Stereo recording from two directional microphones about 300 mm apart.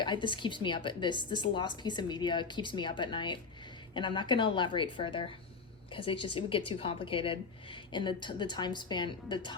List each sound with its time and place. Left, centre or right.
0.0 s a woman's voice: centre